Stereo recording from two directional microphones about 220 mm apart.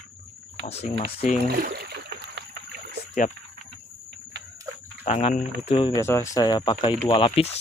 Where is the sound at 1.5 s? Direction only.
45° right (ahead or behind).